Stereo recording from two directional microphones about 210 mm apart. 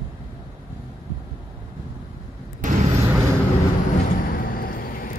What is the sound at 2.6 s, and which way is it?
Vehicle, 35° right (ahead or behind).